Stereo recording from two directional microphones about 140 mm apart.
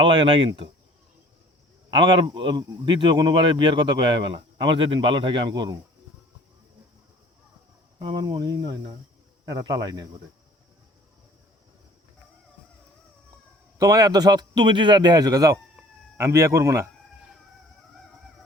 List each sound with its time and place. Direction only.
0.0 s speech: 35° right (ahead or behind)
1.9 s speech: 35° right (ahead or behind)
8.0 s a man's voice: 30° right (ahead or behind)
13.7 s a man's voice: 25° right (ahead or behind)